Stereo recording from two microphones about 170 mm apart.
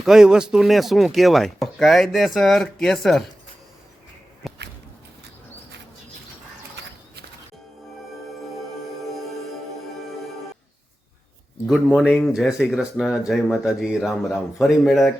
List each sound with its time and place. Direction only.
0.0 s chopping: centre (ahead or behind)
4.4 s a sound: centre (ahead or behind)
9.0 s music: centre (ahead or behind)
11.6 s chopping: centre (ahead or behind)